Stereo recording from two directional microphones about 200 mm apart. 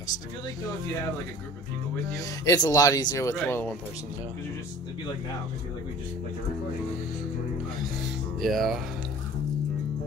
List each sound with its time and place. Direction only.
2.1 s speech: 20° left (ahead or behind)
8.4 s speech: centre (ahead or behind)